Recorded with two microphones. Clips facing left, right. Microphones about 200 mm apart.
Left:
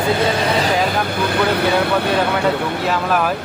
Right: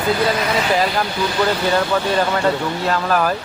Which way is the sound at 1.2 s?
60° left (ahead or behind).